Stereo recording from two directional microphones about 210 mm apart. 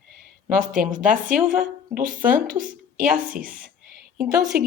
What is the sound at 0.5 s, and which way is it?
Speech, 40° right (ahead or behind).